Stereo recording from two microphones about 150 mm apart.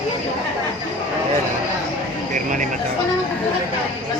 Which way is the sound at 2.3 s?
60° right (ahead or behind).